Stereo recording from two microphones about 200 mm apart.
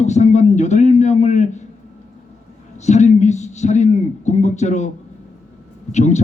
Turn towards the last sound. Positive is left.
turn(degrees=35)  # may be behind; listen again after turning